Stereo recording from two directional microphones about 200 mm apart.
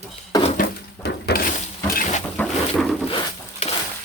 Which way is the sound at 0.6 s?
55° left (ahead or behind).